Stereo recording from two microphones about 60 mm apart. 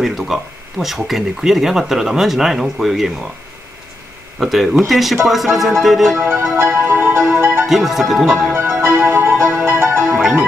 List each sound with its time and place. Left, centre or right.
0.0 s speech: centre
4.4 s speech: centre
6.3 s music: right
6.8 s music: right
7.6 s speech: centre
8.8 s music: right